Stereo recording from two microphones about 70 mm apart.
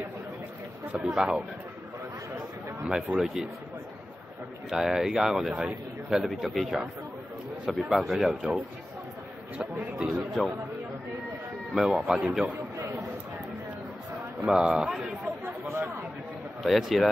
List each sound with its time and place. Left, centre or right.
1.1 s speech: centre
2.9 s speech: centre
4.6 s speech: centre
9.6 s speech: centre
11.7 s speech: centre
12.7 s a sound: right
14.4 s speech: centre
15.4 s a sound: right
16.6 s speech: centre